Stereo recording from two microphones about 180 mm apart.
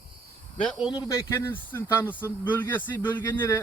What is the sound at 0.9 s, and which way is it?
Speech, 15° left (ahead or behind).